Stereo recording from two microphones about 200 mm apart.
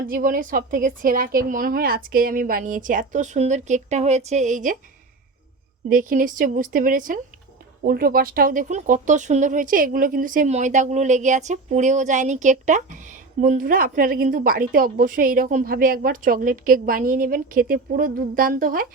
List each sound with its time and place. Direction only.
0.1 s a woman's voice: 45° right (ahead or behind)
5.9 s speech: 45° right (ahead or behind)